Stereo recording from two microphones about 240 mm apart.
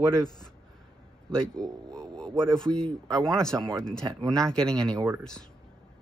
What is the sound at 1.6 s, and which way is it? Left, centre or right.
Speech, centre.